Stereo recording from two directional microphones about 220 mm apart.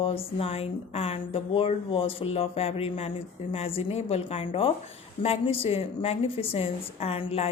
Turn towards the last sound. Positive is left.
turn(degrees=25)  # may be behind; listen again after turning